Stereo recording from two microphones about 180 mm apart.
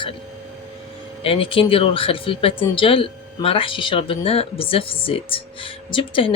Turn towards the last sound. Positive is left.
turn(degrees=30)  # may be behind; listen again after turning